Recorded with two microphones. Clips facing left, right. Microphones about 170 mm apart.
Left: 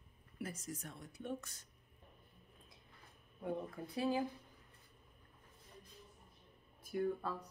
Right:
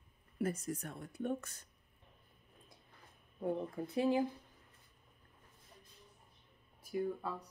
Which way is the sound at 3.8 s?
30° right (ahead or behind).